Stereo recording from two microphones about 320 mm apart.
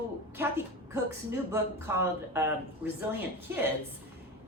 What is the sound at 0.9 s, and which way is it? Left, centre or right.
Speech, centre.